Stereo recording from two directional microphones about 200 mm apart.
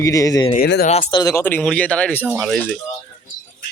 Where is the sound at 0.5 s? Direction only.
50° left (ahead or behind).